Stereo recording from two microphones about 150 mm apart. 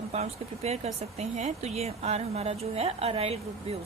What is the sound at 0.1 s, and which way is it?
Speech, 45° right (ahead or behind).